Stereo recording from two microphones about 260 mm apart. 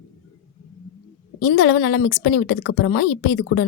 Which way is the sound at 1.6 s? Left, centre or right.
Left.